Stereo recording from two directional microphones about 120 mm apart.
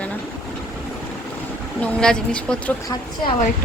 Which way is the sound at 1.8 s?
10° left (ahead or behind).